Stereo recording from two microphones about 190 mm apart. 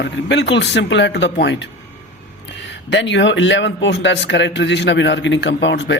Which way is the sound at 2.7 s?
70° left (ahead or behind).